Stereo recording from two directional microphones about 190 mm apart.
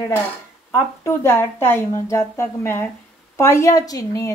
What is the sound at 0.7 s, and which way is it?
A woman's voice, 15° left (ahead or behind).